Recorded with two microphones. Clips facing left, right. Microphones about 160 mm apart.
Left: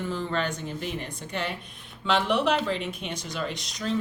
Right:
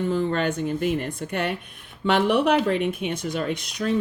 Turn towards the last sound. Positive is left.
turn(degrees=-55)  # may be behind; listen again after turning